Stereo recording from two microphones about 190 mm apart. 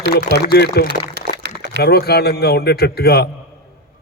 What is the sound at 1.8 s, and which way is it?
A man's voice, 55° left (ahead or behind).